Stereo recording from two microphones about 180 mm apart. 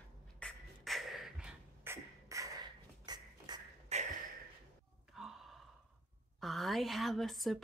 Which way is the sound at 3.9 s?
35° right (ahead or behind).